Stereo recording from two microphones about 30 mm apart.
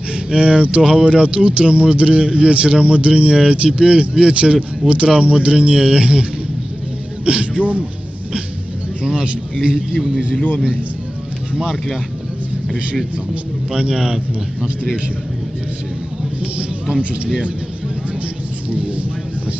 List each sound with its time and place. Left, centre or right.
0.1 s speech: right
7.2 s speech: right
9.9 s a man's voice: centre
11.5 s speech: right
13.7 s speech: right
18.7 s vehicle: right